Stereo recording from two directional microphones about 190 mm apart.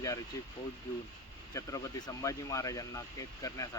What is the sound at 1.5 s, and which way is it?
Speech, 20° left (ahead or behind).